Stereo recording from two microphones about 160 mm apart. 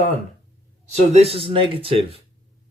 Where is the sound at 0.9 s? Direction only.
40° right (ahead or behind).